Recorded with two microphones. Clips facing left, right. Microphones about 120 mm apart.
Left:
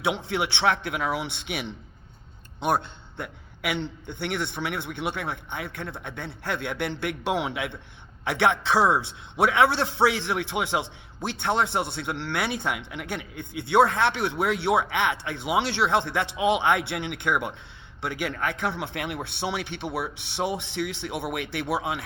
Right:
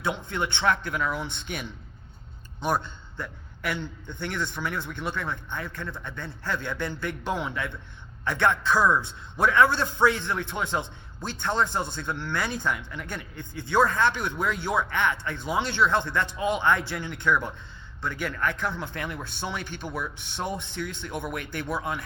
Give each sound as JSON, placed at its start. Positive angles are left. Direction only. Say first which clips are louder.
{"t": 0.0, "sound": "a man's voice", "louder": "left 3 dB", "side_deg": 75}
{"t": 3.2, "sound": "a man's voice", "louder": "left 1 dB", "side_deg": 65}